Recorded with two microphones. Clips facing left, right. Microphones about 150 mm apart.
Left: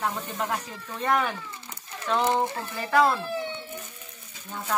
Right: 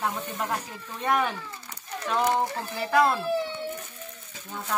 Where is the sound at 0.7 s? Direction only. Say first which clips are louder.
Left 1 dB; 15° right (ahead or behind).